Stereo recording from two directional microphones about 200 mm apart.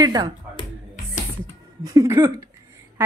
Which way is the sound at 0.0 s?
20° right (ahead or behind).